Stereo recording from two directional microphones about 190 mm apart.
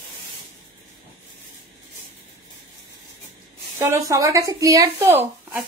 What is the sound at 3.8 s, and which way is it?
Speech, 15° right (ahead or behind).